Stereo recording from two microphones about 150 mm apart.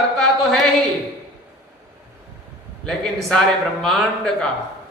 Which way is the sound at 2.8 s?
5° left (ahead or behind).